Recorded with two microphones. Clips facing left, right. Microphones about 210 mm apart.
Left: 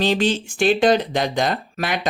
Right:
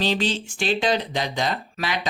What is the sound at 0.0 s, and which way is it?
Speech, 50° left (ahead or behind).